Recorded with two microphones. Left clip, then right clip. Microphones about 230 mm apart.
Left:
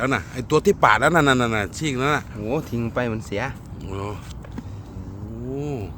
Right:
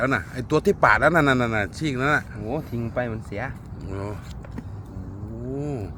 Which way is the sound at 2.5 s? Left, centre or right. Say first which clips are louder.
Left 6 dB; left.